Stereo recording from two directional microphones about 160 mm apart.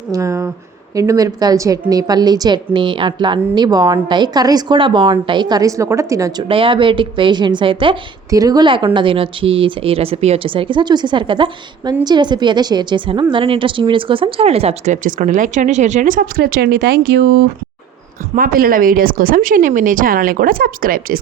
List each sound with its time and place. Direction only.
0.1 s a woman's voice: 20° right (ahead or behind)
6.5 s speech: 35° right (ahead or behind)
8.3 s a woman's voice: 20° right (ahead or behind); by 17.4 s 90° right
18.3 s speech: 65° right (ahead or behind)